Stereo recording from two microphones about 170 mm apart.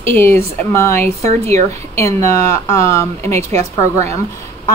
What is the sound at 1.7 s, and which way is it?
A woman's voice, 15° left (ahead or behind).